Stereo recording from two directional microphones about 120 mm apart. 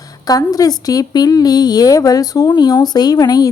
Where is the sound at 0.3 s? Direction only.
30° left (ahead or behind).